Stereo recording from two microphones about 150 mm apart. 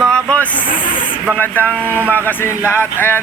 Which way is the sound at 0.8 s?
35° left (ahead or behind).